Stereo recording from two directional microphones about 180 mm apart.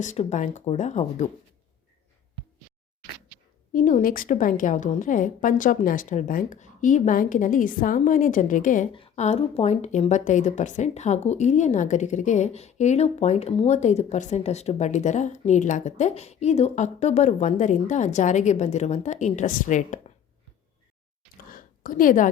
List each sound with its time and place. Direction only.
0.0 s speech: 40° left (ahead or behind)
3.7 s a woman's voice: 45° left (ahead or behind)
8.9 s speech: 30° left (ahead or behind)
21.5 s a sound: 50° left (ahead or behind)